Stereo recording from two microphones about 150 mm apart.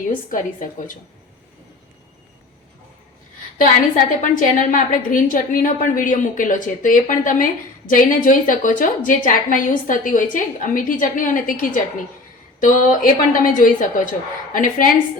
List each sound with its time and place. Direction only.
3.6 s a woman's voice: 60° left (ahead or behind)